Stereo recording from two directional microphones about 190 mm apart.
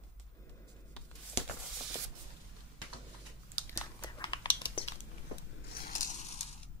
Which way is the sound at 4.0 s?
25° left (ahead or behind).